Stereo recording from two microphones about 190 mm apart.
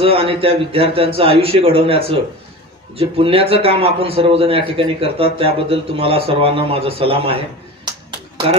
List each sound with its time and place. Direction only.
0.0 s a man's voice: 30° right (ahead or behind)